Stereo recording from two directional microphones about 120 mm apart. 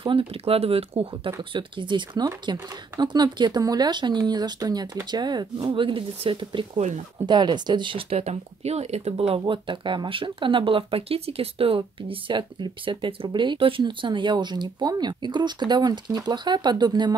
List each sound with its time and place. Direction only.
0.0 s speech: 50° right (ahead or behind)